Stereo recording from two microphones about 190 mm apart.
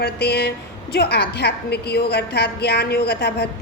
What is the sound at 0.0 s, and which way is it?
A woman's voice, 60° left (ahead or behind).